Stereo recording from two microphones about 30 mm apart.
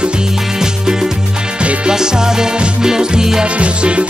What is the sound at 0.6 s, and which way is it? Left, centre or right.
Music, centre.